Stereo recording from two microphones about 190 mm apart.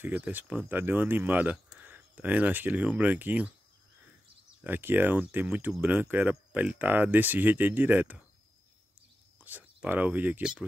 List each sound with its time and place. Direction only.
0.0 s speech: 10° right (ahead or behind)
4.6 s speech: 10° right (ahead or behind)
9.4 s speech: 10° right (ahead or behind)